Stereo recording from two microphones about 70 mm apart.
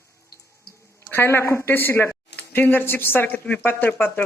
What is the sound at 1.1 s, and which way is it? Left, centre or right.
Speech, left.